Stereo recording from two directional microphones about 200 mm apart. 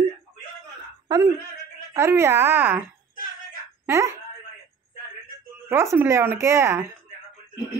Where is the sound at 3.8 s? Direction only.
10° right (ahead or behind).